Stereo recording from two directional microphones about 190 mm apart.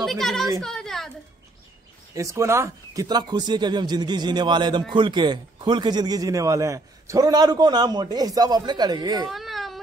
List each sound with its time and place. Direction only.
0.0 s a woman's voice: centre (ahead or behind)
2.1 s a man's voice: 15° right (ahead or behind)
9.3 s baby cry: centre (ahead or behind)